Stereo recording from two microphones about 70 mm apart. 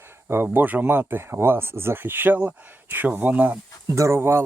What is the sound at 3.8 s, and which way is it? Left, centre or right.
Speech, right.